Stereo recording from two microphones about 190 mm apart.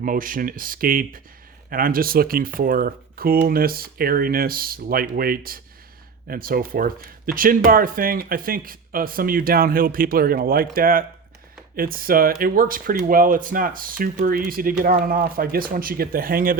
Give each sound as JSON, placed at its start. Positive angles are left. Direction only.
{"t": 0.0, "sound": "speech", "side_deg": -45}